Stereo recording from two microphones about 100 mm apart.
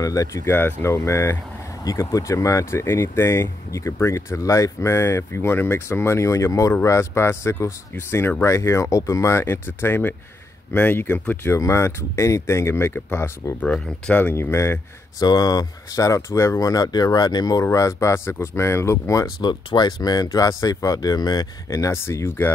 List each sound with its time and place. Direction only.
0.0 s speech: 35° left (ahead or behind)
13.7 s speech: 10° left (ahead or behind)
14.2 s speech: 25° left (ahead or behind)
15.2 s speech: 40° left (ahead or behind)
19.4 s speech: 45° left (ahead or behind); by 22.5 s 25° left (ahead or behind)